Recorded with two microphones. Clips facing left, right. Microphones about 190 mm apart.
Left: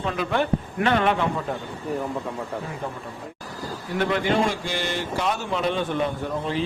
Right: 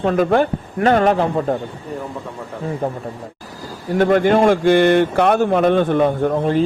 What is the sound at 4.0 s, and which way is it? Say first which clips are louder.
A man's voice: right 9 dB; 50° right (ahead or behind).